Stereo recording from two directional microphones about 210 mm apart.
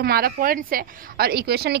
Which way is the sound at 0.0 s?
45° right (ahead or behind).